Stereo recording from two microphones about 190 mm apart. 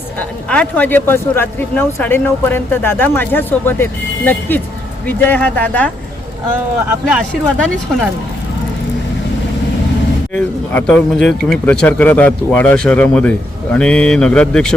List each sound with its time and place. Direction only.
0.2 s speech: 5° left (ahead or behind)
7.1 s speech: centre (ahead or behind)
10.3 s speech: 10° left (ahead or behind)